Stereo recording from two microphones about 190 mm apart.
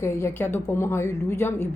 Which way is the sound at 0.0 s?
15° left (ahead or behind).